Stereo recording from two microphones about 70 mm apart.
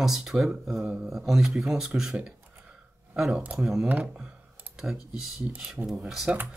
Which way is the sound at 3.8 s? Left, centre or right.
Right.